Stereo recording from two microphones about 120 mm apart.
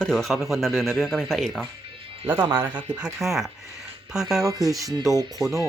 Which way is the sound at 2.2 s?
20° right (ahead or behind).